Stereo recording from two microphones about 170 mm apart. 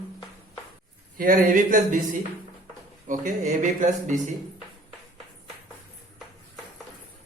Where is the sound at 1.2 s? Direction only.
55° right (ahead or behind).